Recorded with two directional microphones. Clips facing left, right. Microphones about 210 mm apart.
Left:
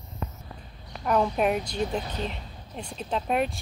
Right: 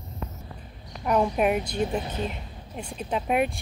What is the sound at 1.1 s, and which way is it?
Speech, 10° right (ahead or behind).